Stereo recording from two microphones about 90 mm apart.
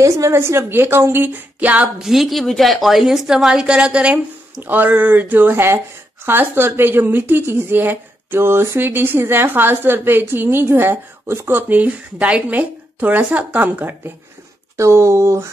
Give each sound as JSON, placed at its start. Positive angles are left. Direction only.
{"t": 0.0, "sound": "a woman's voice", "side_deg": -30}
{"t": 2.0, "sound": "a woman's voice", "side_deg": -5}